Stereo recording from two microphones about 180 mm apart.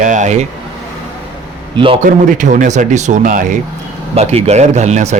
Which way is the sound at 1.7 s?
30° right (ahead or behind).